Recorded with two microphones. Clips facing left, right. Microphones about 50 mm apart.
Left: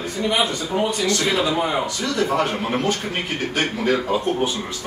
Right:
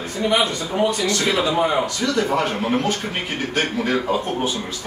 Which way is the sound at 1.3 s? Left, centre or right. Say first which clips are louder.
Right 2 dB; centre.